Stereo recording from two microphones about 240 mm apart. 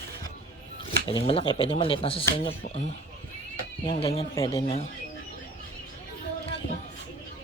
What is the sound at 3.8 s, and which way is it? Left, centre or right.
Speech, left.